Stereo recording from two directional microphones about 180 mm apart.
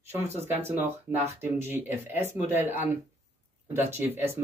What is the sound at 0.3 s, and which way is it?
Speech, 35° right (ahead or behind).